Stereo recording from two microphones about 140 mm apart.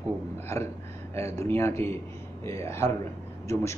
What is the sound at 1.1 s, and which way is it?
A man's voice, 20° left (ahead or behind).